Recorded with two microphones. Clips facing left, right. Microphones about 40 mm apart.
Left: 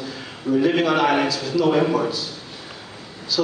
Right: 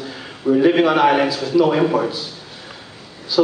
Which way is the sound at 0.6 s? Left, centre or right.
Centre.